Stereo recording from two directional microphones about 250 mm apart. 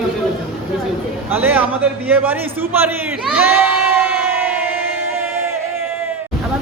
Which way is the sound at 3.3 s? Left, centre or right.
Centre.